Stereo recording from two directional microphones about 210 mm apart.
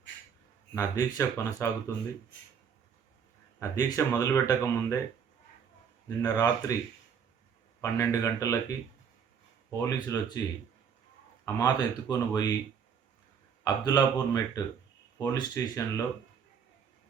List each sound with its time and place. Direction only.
0.7 s speech: 15° left (ahead or behind)
3.6 s speech: 15° left (ahead or behind)
6.1 s speech: 20° left (ahead or behind)
7.8 s speech: 15° left (ahead or behind)
9.6 s speech: 15° left (ahead or behind)
11.4 s speech: 15° left (ahead or behind)
13.7 s speech: 15° left (ahead or behind)